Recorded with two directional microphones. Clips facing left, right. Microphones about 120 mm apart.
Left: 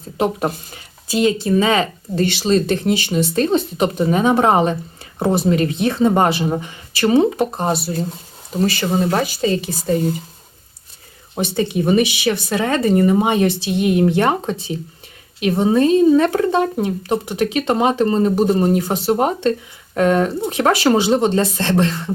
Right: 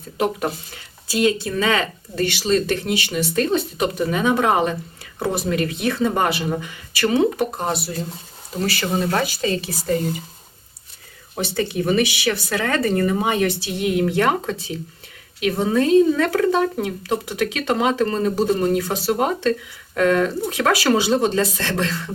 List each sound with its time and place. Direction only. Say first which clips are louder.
0.2 s speech: left 3 dB; 25° left (ahead or behind)
11.3 s speech: left 3 dB; 20° left (ahead or behind)